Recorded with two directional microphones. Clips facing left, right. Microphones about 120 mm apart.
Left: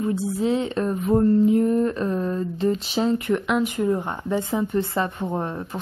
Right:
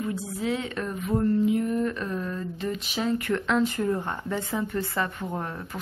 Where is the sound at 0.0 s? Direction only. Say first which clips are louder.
Left 6 dB; 30° left (ahead or behind).